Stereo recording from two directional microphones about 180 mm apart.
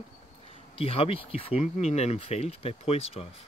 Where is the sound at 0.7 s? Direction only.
30° left (ahead or behind).